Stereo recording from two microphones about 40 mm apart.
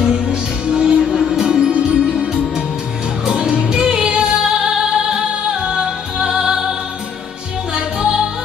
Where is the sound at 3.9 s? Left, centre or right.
Right.